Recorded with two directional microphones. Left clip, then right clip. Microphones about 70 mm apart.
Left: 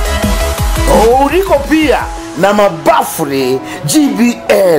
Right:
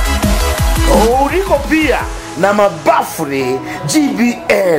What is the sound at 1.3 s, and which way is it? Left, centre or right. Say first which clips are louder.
Speech: left 3 dB; left.